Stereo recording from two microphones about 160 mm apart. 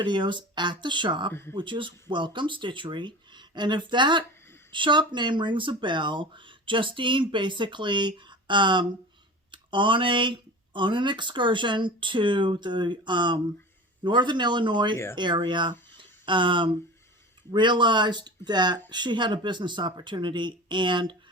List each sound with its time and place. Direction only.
0.0 s speech: 30° right (ahead or behind)
1.3 s speech: 15° left (ahead or behind)
1.5 s speech: 30° right (ahead or behind)
16.0 s a sound: 30° right (ahead or behind)
17.5 s speech: 30° right (ahead or behind)